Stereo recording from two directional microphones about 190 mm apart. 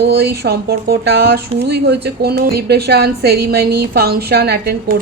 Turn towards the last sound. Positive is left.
turn(degrees=-50)  # may be behind; listen again after turning